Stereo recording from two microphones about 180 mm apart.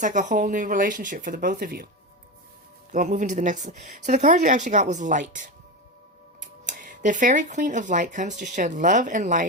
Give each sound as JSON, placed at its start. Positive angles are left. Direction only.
{"t": 0.0, "sound": "speech", "side_deg": -45}
{"t": 2.9, "sound": "speech", "side_deg": -45}
{"t": 6.4, "sound": "speech", "side_deg": -45}